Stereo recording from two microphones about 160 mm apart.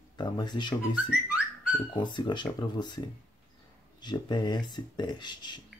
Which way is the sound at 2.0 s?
30° left (ahead or behind).